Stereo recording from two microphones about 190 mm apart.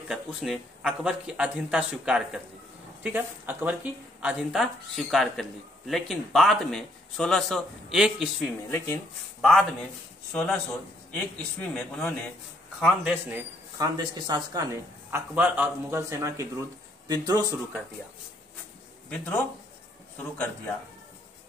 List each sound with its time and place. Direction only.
0.1 s speech: centre (ahead or behind)
8.6 s speech: 15° left (ahead or behind)
9.4 s speech: 5° left (ahead or behind)
11.6 s speech: 5° left (ahead or behind)
12.8 s speech: 5° right (ahead or behind)
13.7 s speech: 20° right (ahead or behind)
19.0 s speech: 5° left (ahead or behind)